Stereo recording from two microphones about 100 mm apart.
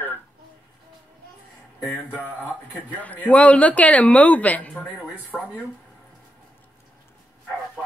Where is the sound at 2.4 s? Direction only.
15° left (ahead or behind).